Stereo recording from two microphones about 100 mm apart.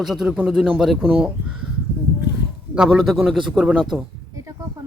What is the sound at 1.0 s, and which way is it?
Speech, 15° right (ahead or behind).